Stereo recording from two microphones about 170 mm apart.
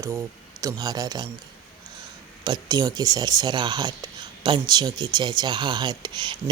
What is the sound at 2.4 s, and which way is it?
Speech, 20° right (ahead or behind).